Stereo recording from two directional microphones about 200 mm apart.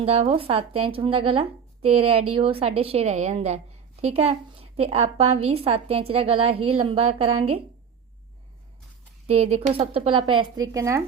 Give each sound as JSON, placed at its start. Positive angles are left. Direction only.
{"t": 0.0, "sound": "a woman's voice", "side_deg": -30}
{"t": 9.2, "sound": "a woman's voice", "side_deg": -30}